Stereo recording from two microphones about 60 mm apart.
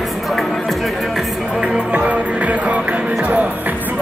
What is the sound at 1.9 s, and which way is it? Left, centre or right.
Music, right.